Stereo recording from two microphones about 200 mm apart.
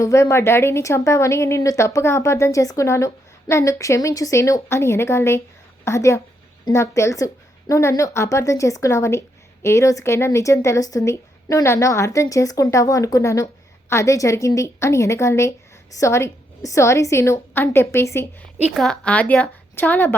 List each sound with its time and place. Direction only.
0.0 s speech: 15° left (ahead or behind)
18.7 s speech: centre (ahead or behind)